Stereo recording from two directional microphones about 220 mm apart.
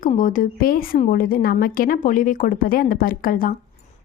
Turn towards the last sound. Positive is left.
turn(degrees=40)  # may be behind; listen again after turning